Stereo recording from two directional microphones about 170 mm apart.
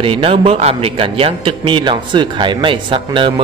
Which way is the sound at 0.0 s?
35° right (ahead or behind).